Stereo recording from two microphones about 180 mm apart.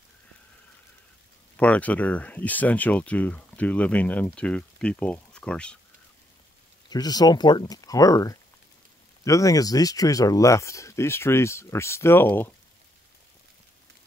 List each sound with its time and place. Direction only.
1.6 s speech: 10° left (ahead or behind)
6.9 s speech: 20° left (ahead or behind)